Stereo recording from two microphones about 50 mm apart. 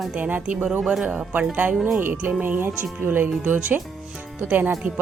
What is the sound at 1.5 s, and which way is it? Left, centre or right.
Speech, right.